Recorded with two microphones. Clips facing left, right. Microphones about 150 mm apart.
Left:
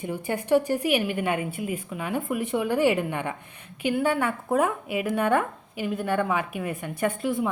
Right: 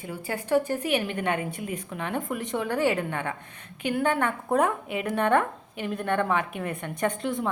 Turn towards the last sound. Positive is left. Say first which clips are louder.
# left 2 dB
turn(degrees=5)  # may be behind; listen again after turning